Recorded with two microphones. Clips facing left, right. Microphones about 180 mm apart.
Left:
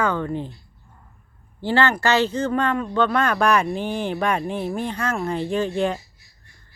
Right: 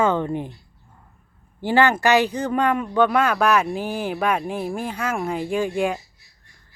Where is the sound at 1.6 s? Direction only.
15° right (ahead or behind).